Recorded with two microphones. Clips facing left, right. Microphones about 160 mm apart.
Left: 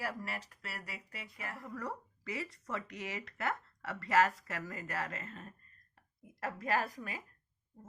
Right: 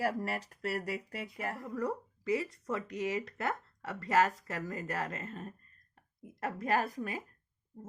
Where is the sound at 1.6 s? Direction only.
20° right (ahead or behind).